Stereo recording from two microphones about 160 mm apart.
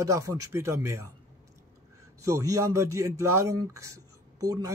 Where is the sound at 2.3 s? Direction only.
20° right (ahead or behind).